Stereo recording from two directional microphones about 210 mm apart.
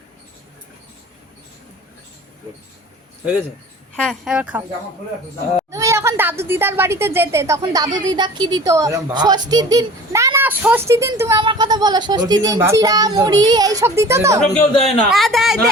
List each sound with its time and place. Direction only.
3.9 s a man's voice: centre (ahead or behind)
5.7 s a sound: 15° right (ahead or behind)
6.5 s a child's voice: 10° right (ahead or behind)
14.8 s a man's voice: centre (ahead or behind)